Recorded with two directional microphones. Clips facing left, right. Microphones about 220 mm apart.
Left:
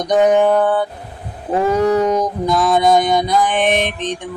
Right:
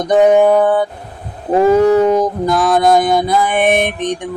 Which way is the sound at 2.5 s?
Centre (ahead or behind).